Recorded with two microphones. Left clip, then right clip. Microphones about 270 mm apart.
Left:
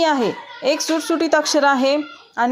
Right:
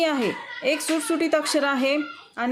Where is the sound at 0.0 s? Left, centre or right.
Centre.